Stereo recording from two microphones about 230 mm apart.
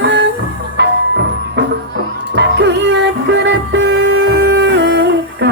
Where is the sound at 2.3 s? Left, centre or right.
Right.